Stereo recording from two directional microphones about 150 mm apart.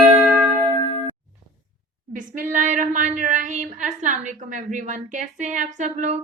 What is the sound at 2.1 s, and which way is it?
A woman's voice, 60° right (ahead or behind).